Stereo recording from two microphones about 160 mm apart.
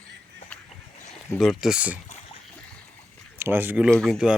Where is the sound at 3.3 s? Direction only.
15° right (ahead or behind).